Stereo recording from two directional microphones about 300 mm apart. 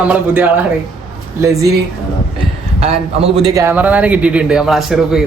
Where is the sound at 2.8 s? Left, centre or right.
Centre.